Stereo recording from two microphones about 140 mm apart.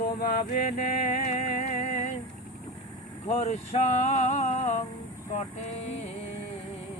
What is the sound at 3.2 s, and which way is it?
Mantra, 50° left (ahead or behind).